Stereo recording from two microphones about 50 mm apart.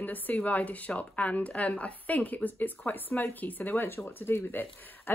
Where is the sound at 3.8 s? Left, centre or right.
Left.